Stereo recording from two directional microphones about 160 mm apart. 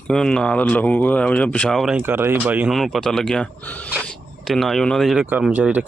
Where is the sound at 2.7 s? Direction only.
Centre (ahead or behind).